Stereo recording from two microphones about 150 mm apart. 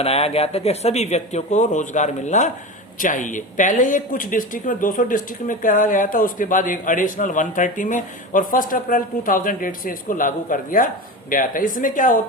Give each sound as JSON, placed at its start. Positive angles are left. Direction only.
{"t": 0.0, "sound": "speech", "side_deg": 40}